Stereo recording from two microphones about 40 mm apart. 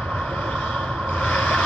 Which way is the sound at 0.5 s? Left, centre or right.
Left.